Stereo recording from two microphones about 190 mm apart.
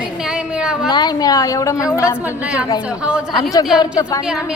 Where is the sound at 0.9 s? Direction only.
20° left (ahead or behind).